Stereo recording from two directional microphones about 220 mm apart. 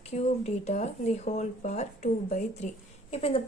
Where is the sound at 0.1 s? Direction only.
30° left (ahead or behind).